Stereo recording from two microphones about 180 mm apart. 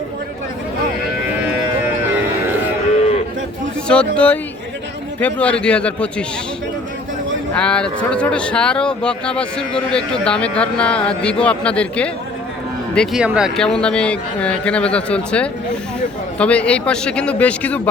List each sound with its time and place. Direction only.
3.8 s a man's voice: 5° left (ahead or behind)
7.5 s a man's voice: 5° left (ahead or behind)